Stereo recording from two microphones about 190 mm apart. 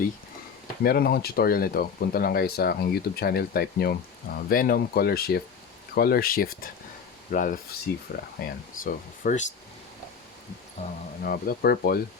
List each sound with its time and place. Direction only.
0.9 s speech: 55° left (ahead or behind)
8.8 s speech: 45° left (ahead or behind)
10.8 s speech: 35° left (ahead or behind)
11.2 s speech: 50° left (ahead or behind)